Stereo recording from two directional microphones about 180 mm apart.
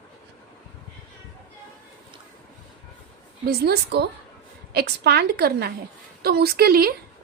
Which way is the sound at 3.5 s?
60° right (ahead or behind).